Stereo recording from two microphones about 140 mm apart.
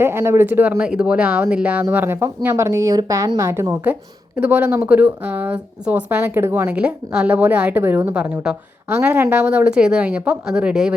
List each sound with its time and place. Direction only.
0.0 s speech: 20° right (ahead or behind)